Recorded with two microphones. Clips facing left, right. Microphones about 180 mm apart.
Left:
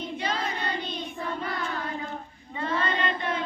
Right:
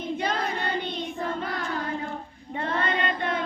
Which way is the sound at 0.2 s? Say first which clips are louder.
Right 1 dB; 55° right (ahead or behind).